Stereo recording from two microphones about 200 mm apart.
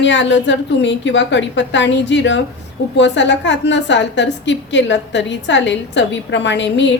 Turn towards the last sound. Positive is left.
turn(degrees=65)  # may be behind; listen again after turning